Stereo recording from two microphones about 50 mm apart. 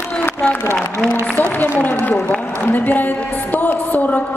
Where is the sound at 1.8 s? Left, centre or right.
Left.